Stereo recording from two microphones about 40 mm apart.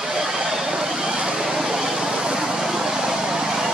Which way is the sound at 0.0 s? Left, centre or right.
Centre.